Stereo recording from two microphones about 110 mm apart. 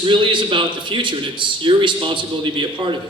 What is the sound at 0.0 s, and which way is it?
A man's voice, 45° right (ahead or behind).